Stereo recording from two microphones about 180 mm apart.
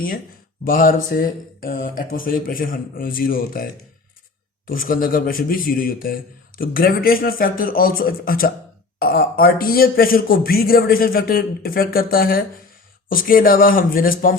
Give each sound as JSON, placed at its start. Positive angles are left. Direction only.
{"t": 0.6, "sound": "a man's voice", "side_deg": 50}